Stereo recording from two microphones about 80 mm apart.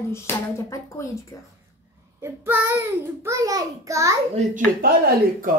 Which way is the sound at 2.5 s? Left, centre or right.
Right.